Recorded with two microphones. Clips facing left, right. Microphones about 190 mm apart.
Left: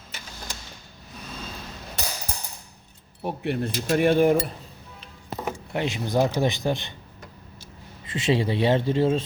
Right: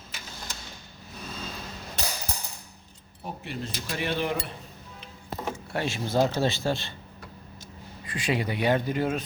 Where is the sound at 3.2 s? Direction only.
60° left (ahead or behind); by 4.5 s 45° left (ahead or behind).